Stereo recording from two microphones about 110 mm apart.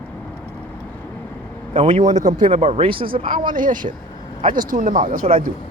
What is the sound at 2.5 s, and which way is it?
Speech, 60° right (ahead or behind).